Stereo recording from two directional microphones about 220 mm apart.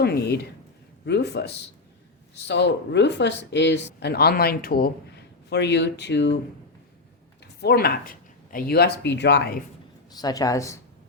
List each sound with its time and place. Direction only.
0.0 s speech: 45° left (ahead or behind)
7.6 s speech: 45° left (ahead or behind)
10.2 s speech: 15° left (ahead or behind)